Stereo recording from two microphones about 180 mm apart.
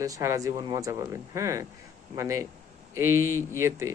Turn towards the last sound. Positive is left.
turn(degrees=-15)  # may be behind; listen again after turning